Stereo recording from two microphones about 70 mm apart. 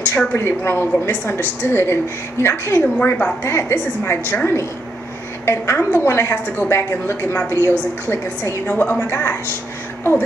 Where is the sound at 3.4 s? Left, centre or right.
Left.